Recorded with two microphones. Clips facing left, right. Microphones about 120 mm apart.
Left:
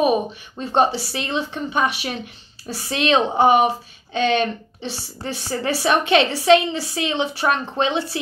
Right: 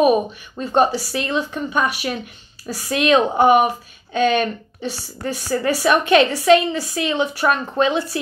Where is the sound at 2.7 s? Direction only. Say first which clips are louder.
Right 3 dB; 35° left (ahead or behind).